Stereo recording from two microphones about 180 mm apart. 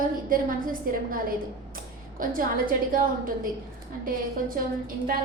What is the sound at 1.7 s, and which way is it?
A woman's voice, 50° right (ahead or behind).